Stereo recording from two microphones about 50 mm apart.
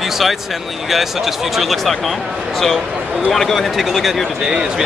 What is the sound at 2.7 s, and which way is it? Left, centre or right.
Speech, centre.